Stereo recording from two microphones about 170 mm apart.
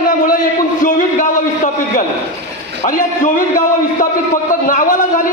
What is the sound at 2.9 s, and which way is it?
A man's voice, 50° left (ahead or behind).